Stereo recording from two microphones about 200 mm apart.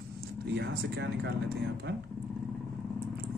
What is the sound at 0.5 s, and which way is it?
Speech, 60° right (ahead or behind).